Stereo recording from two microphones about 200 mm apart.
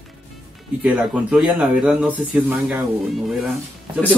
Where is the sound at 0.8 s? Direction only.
5° right (ahead or behind).